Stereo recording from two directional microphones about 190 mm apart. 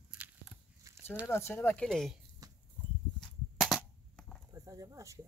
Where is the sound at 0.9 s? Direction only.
15° right (ahead or behind).